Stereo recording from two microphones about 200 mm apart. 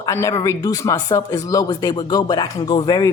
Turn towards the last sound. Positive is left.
turn(degrees=20)  # may be behind; listen again after turning